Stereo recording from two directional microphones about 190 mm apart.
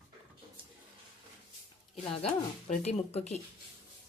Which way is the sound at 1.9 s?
30° left (ahead or behind).